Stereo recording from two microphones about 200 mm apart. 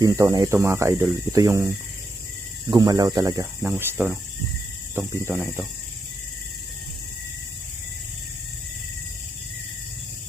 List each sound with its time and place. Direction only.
0.0 s speech: 15° right (ahead or behind)